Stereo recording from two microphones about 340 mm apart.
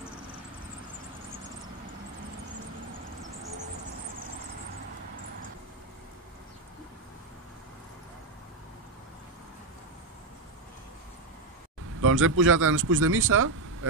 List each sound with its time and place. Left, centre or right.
12.0 s speech: right